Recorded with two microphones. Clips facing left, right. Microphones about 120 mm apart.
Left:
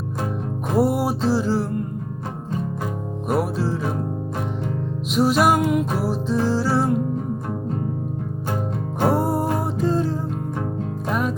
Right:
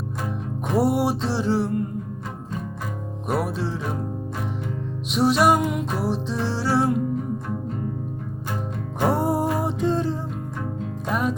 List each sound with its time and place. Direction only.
0.8 s music: centre (ahead or behind)
3.2 s music: centre (ahead or behind)
5.1 s music: centre (ahead or behind)
9.0 s music: centre (ahead or behind)